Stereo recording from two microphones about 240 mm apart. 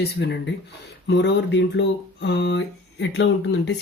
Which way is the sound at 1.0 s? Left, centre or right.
Left.